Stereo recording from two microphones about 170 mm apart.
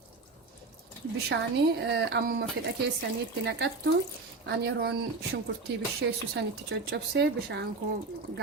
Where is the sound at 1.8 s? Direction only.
80° right.